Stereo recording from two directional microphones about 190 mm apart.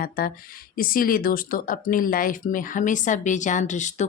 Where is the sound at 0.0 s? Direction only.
50° left (ahead or behind).